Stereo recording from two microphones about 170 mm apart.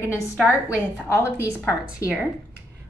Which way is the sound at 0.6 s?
10° right (ahead or behind).